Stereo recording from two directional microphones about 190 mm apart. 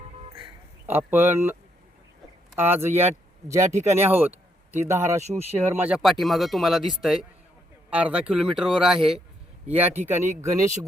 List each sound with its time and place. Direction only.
0.9 s speech: 10° right (ahead or behind)
2.6 s speech: 10° right (ahead or behind)